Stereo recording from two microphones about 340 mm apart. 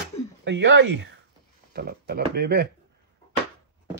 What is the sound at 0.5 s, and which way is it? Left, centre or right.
Speech, right.